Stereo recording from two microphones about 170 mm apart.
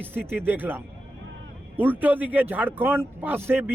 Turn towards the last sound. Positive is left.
turn(degrees=-15)  # may be behind; listen again after turning